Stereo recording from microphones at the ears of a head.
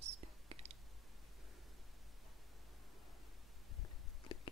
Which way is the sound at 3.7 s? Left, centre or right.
Left.